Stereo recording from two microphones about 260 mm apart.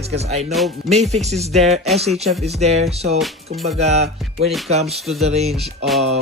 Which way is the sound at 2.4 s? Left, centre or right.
Right.